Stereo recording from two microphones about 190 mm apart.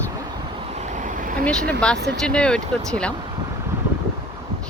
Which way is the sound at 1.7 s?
5° left (ahead or behind).